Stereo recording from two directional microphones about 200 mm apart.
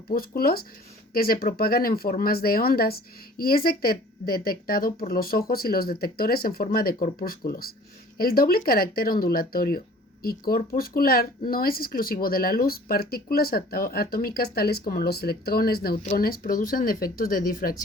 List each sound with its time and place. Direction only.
0.1 s speech: 50° left (ahead or behind)